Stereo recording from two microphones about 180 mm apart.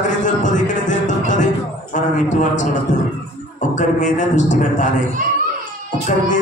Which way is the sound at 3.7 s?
45° left (ahead or behind).